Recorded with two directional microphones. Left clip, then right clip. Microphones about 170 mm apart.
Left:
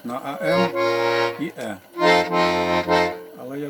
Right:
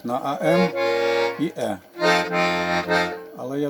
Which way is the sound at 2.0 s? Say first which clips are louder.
Left 2 dB; 15° left (ahead or behind).